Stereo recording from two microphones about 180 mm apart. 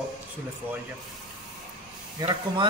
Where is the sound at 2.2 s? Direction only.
25° right (ahead or behind).